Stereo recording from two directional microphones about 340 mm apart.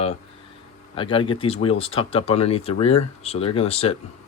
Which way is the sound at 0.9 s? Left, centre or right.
Centre.